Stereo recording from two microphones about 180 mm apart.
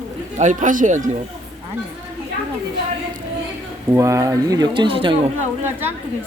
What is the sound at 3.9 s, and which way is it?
Speech, 15° right (ahead or behind).